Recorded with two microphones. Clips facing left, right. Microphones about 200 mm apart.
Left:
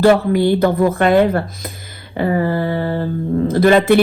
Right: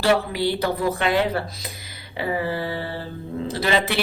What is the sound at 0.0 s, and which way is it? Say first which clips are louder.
Speech: left 8 dB; 50° left (ahead or behind).